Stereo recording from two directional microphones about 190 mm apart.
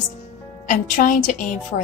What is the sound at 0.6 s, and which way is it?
Speech, 40° left (ahead or behind).